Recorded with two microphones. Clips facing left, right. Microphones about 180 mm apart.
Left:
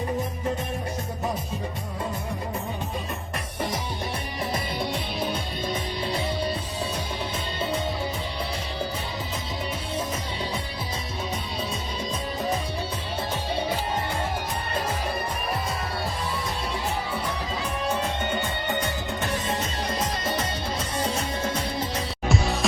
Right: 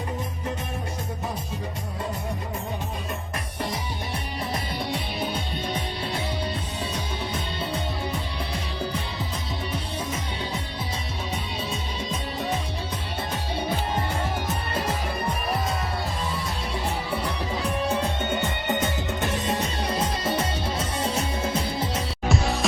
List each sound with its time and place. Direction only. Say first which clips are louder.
18.8 s music: right 2 dB; 20° right (ahead or behind)
22.3 s music: even; centre (ahead or behind)